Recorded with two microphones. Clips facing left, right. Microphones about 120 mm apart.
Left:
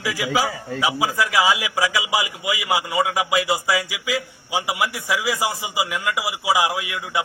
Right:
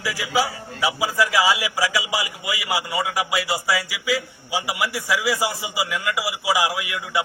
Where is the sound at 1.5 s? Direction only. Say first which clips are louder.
Left 1 dB; 20° left (ahead or behind).